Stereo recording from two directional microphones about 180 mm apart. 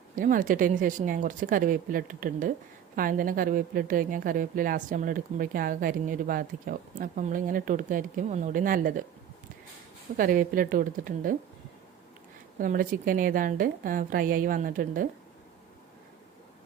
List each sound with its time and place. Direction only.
0.2 s a woman's voice: 50° right (ahead or behind)
10.2 s a woman's voice: 50° right (ahead or behind)
12.5 s a woman's voice: 50° right (ahead or behind)